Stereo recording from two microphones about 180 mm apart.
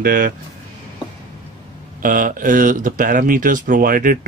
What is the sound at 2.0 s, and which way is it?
Speech, 50° right (ahead or behind).